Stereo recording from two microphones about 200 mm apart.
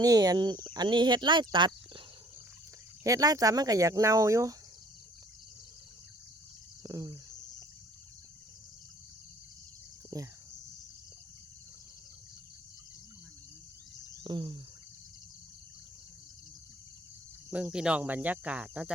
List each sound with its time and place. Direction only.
0.0 s speech: 20° right (ahead or behind)
6.8 s speech: 15° right (ahead or behind)
10.1 s speech: 15° right (ahead or behind)
14.3 s speech: 20° right (ahead or behind)
17.5 s speech: 5° right (ahead or behind)